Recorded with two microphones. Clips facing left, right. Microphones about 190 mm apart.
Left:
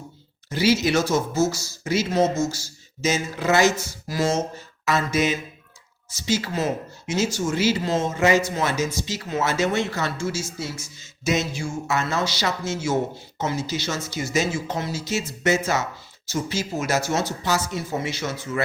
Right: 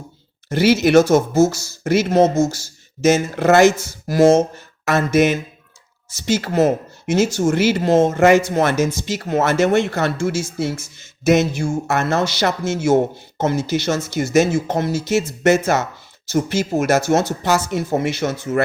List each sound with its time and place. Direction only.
0.5 s speech: 55° right (ahead or behind)
2.3 s speech: 25° right (ahead or behind)
3.0 s speech: 55° right (ahead or behind)